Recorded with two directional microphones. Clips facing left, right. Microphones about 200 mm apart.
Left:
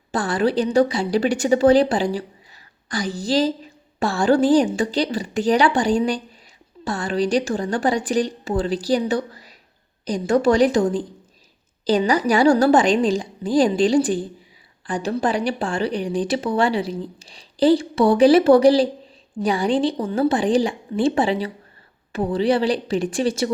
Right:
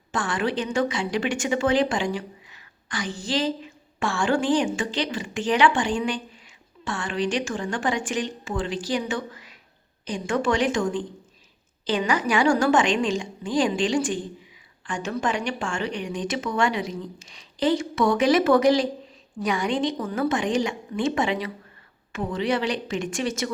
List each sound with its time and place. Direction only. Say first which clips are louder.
0.1 s a woman's voice: left 6 dB; 35° left (ahead or behind)